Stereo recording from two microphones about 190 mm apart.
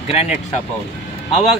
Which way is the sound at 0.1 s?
30° left (ahead or behind).